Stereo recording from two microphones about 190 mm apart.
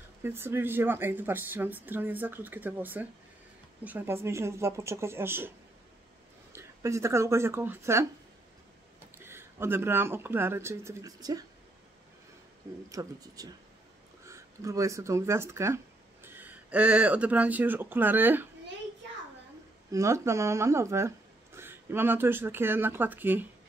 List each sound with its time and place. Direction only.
0.2 s speech: 10° right (ahead or behind)
6.5 s speech: 15° right (ahead or behind)
9.2 s speech: 15° right (ahead or behind)
13.0 s speech: 15° right (ahead or behind)
19.9 s speech: 15° right (ahead or behind)